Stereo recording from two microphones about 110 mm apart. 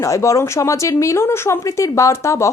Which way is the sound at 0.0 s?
30° left (ahead or behind).